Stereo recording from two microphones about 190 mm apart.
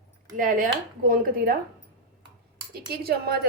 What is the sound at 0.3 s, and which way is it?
A woman's voice, 45° right (ahead or behind).